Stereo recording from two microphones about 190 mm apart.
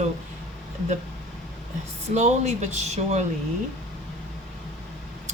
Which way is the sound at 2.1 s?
35° right (ahead or behind).